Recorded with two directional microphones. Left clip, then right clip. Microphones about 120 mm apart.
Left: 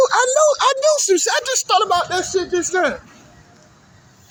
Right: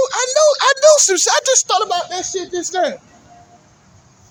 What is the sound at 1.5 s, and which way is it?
Speech, 25° right (ahead or behind).